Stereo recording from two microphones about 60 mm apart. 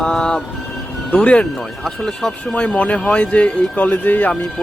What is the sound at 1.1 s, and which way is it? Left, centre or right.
Speech, centre.